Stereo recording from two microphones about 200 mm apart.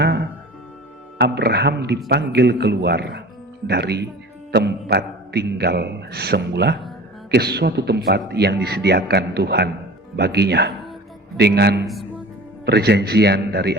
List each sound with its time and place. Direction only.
1.2 s a man's voice: 55° right (ahead or behind)